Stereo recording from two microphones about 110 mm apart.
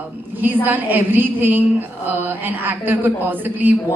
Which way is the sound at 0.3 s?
15° right (ahead or behind).